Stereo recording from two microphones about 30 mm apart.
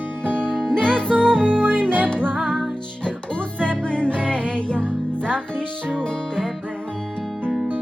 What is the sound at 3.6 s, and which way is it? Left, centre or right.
Music, left.